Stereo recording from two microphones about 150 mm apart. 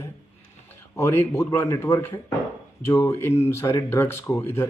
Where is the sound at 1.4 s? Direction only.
20° left (ahead or behind).